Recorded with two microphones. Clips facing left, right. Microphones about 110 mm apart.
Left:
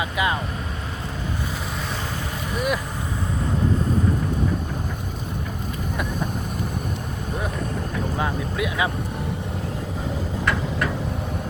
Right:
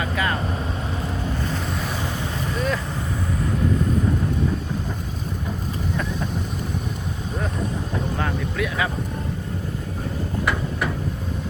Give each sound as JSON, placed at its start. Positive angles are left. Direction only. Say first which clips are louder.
{"t": 0.0, "sound": "vehicle", "louder": "left 1 dB", "side_deg": 15}
{"t": 2.6, "sound": "vehicle", "louder": "left 1 dB", "side_deg": 15}
{"t": 8.2, "sound": "boat", "louder": "left 2 dB", "side_deg": 20}